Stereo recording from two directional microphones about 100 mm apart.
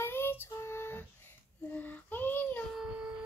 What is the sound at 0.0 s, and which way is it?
Child singing, 25° left (ahead or behind).